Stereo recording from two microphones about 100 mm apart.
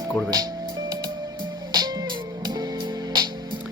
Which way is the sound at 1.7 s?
45° right (ahead or behind).